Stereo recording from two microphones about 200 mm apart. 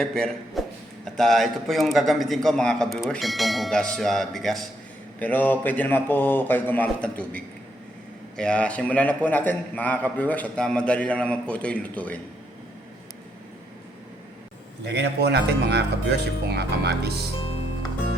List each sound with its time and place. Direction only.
0.0 s a man's voice: 5° left (ahead or behind)
14.8 s speech: 60° right (ahead or behind)